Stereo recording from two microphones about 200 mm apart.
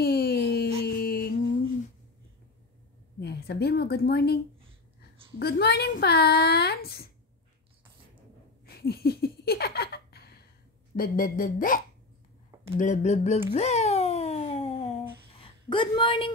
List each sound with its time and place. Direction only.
0.0 s music: 50° left (ahead or behind)
3.2 s a woman's voice: 55° left (ahead or behind)
5.4 s speech: 55° left (ahead or behind)
8.6 s laughter: 50° left (ahead or behind)
11.0 s speech: 45° left (ahead or behind)
12.7 s a sound: 40° left (ahead or behind)
15.7 s a woman's voice: 25° left (ahead or behind)